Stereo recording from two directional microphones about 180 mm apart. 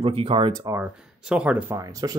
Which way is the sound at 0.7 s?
10° right (ahead or behind).